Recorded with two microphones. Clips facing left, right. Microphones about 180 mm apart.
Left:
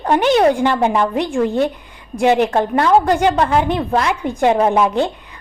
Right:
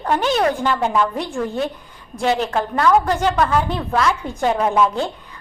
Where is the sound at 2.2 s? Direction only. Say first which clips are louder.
Left 5 dB; 15° left (ahead or behind).